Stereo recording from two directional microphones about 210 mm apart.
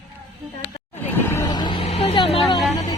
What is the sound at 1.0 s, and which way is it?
Vehicle, 10° left (ahead or behind).